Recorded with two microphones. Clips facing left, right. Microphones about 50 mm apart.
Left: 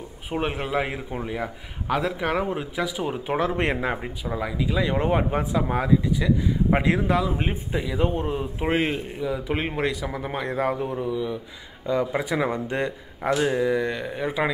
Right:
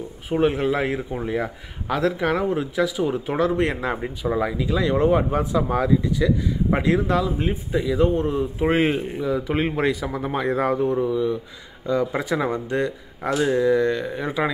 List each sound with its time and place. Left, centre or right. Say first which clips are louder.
0.3 s speech: right 6 dB; centre
3.8 s speech: right 2 dB; centre
4.4 s speech: right 2 dB; centre
4.6 s speech: even; centre
4.9 s speech: right 6 dB; left
5.5 s speech: right 2 dB; centre
7.3 s speech: right 3 dB; left
8.7 s speech: right 3 dB; centre
9.2 s speech: right 3 dB; centre
11.8 s speech: right 1 dB; centre